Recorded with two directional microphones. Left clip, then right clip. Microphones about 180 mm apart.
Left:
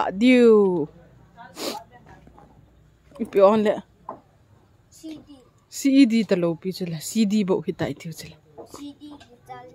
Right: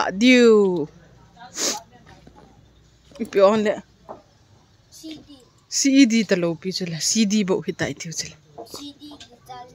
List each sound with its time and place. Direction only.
0.0 s speech: 5° left (ahead or behind)
1.5 s a sound: 5° left (ahead or behind)
3.1 s speech: 5° left (ahead or behind)
5.0 s speech: centre (ahead or behind)